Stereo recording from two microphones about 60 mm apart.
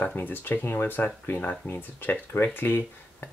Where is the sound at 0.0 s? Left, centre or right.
Left.